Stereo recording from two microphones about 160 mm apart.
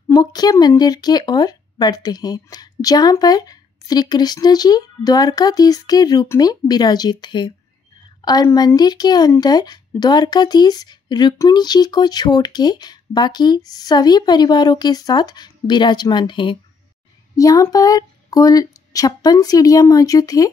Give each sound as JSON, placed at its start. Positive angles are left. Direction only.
{"t": 0.1, "sound": "speech", "side_deg": 25}